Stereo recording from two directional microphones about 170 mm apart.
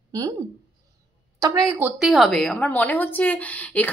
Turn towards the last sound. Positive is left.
turn(degrees=10)  # may be behind; listen again after turning